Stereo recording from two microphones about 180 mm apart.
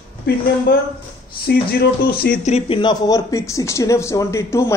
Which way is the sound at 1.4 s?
60° left (ahead or behind).